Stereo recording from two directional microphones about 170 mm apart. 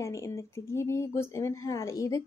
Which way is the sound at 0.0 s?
15° left (ahead or behind).